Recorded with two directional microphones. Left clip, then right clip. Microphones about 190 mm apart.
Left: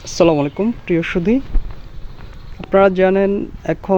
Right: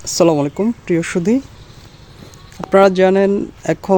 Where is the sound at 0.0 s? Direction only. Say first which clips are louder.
Even; 15° right (ahead or behind).